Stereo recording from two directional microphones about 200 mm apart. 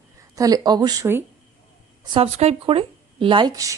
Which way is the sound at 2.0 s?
25° right (ahead or behind).